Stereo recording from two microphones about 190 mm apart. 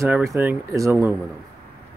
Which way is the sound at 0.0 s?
15° right (ahead or behind).